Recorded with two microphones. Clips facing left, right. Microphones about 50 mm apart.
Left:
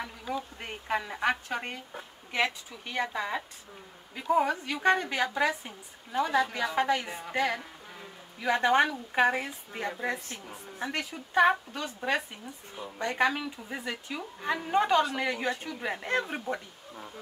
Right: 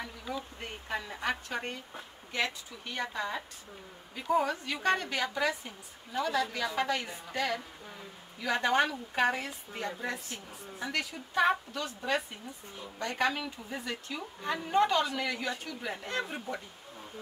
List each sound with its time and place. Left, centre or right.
0.0 s speech: centre
12.7 s speech: centre; by 16.5 s left